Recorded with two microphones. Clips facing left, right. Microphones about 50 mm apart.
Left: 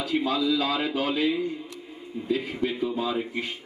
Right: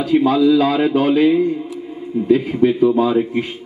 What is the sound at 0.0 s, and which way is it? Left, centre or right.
A man's voice, right.